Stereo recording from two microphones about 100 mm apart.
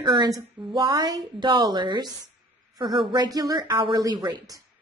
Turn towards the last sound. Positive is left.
turn(degrees=-45)  # may be behind; listen again after turning